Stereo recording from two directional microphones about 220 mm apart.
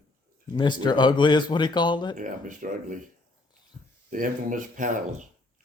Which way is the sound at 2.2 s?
35° right (ahead or behind).